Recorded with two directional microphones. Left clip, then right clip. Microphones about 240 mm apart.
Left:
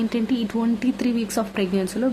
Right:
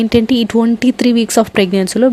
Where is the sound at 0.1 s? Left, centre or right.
Right.